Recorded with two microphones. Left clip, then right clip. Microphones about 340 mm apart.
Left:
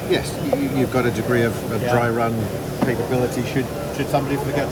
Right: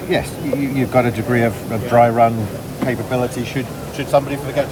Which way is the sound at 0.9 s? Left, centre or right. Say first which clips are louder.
Right 5 dB; centre.